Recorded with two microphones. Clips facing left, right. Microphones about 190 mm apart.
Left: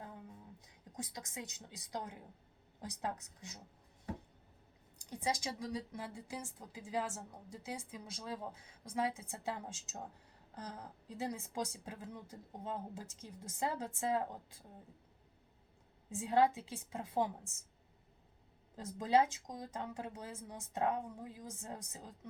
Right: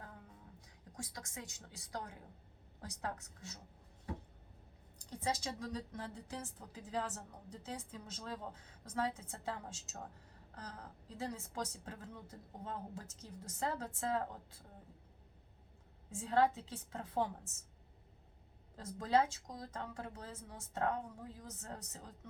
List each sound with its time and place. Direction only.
0.9 s a woman's voice: 20° left (ahead or behind)
5.1 s a woman's voice: 15° left (ahead or behind)
16.0 s a woman's voice: 15° left (ahead or behind)
18.8 s a woman's voice: 15° left (ahead or behind)